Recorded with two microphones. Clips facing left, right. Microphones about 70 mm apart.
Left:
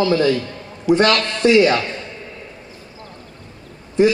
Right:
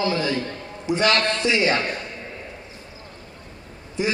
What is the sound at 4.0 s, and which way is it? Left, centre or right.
Speech, left.